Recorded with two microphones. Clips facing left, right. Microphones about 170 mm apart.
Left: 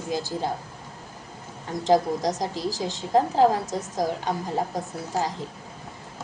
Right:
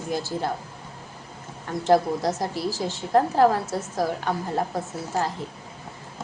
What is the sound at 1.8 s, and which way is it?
A woman's voice, 15° left (ahead or behind).